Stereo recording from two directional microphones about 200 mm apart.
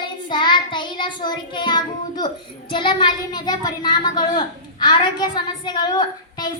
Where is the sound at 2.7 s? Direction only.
25° left (ahead or behind).